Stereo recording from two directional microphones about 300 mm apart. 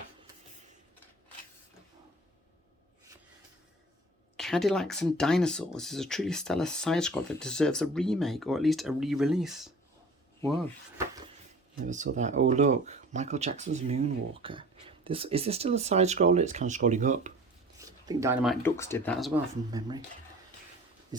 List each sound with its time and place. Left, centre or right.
4.4 s speech: centre
12.1 s speech: right
17.7 s a sound: centre
18.6 s speech: centre
19.7 s speech: centre
21.1 s a sound: centre